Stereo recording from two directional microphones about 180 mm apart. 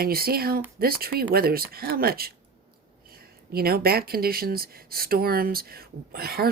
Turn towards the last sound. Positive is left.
turn(degrees=-55)  # may be behind; listen again after turning